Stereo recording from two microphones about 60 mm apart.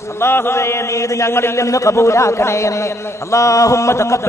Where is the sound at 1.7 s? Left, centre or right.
Left.